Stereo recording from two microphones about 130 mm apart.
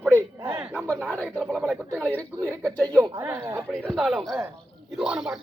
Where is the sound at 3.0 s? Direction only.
20° right (ahead or behind).